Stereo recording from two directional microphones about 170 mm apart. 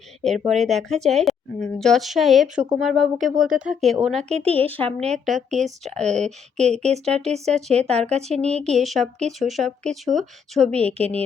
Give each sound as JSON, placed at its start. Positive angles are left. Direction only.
{"t": 0.2, "sound": "a woman's voice", "side_deg": 0}
{"t": 6.7, "sound": "speech", "side_deg": -40}
{"t": 7.9, "sound": "a woman's voice", "side_deg": 5}